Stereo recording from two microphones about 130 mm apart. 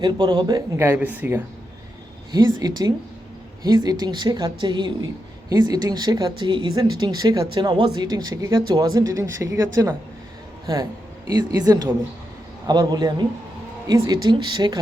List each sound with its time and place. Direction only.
0.0 s speech: 30° right (ahead or behind)
0.9 s speech: 10° right (ahead or behind)
2.3 s speech: 30° right (ahead or behind)
11.3 s speech: 30° right (ahead or behind)